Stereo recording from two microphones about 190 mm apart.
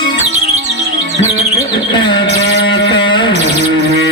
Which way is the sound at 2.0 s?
25° left (ahead or behind).